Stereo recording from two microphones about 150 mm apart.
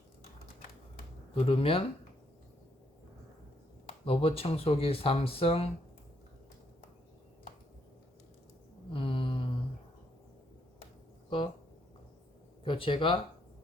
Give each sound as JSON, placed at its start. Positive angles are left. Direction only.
{"t": 1.3, "sound": "speech", "side_deg": 40}
{"t": 4.0, "sound": "speech", "side_deg": 40}
{"t": 8.9, "sound": "a sound", "side_deg": 35}
{"t": 12.6, "sound": "speech", "side_deg": 35}